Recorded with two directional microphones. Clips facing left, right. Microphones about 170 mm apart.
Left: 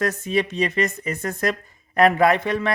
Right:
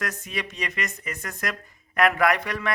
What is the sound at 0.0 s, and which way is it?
Speech, 30° left (ahead or behind).